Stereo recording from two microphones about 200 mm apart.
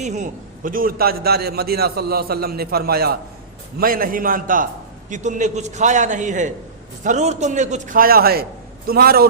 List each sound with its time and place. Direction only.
0.0 s a man's voice: 35° right (ahead or behind)